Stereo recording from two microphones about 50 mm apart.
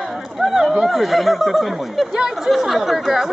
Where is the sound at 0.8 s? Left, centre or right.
Centre.